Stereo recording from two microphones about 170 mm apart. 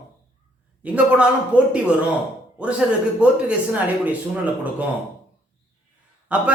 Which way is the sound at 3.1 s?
5° right (ahead or behind).